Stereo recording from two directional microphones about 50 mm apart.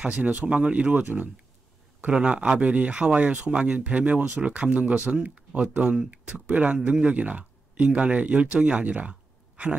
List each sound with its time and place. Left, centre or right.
0.0 s speech: right
2.1 s speech: centre